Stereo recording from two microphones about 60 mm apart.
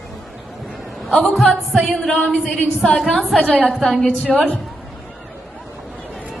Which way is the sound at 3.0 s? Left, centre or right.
Centre.